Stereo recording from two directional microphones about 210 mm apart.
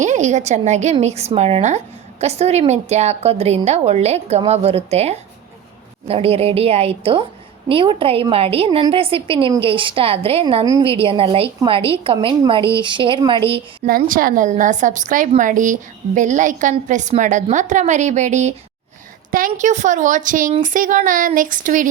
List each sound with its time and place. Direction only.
0.0 s a woman's voice: 35° right (ahead or behind)
13.8 s a woman's voice: 45° right (ahead or behind)